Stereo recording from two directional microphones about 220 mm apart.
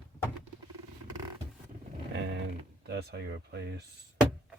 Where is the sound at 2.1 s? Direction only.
55° right (ahead or behind).